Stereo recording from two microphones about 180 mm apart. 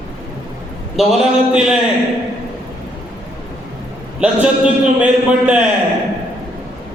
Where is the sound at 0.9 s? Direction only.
Centre (ahead or behind).